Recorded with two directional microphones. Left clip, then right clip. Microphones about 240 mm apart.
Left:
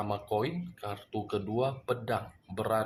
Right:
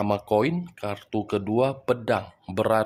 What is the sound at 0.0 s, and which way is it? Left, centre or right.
Speech, right.